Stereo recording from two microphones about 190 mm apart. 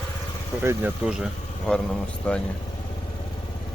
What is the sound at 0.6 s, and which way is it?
Speech, 10° right (ahead or behind).